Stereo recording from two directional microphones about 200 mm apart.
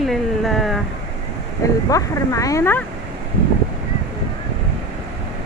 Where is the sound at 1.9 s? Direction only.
15° left (ahead or behind).